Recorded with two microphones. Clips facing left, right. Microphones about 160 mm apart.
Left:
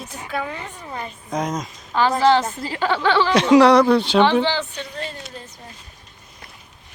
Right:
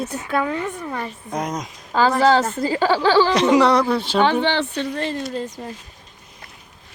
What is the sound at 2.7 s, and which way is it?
Speech, 35° right (ahead or behind).